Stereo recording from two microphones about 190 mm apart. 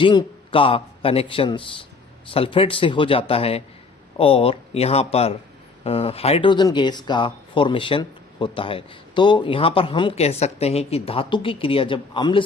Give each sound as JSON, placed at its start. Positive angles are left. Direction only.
{"t": 0.0, "sound": "a man's voice", "side_deg": 25}